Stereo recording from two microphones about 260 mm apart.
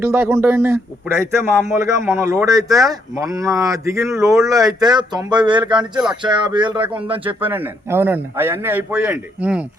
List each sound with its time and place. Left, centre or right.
0.0 s speech: centre
7.1 s speech: centre